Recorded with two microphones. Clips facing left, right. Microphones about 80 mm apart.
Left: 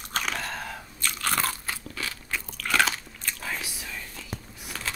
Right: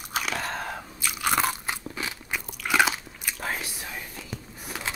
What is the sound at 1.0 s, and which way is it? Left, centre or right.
Crunch, centre.